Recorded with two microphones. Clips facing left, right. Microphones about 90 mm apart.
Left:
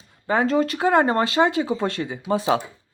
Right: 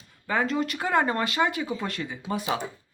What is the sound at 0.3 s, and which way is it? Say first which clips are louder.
Speech: left 6 dB; 30° left (ahead or behind).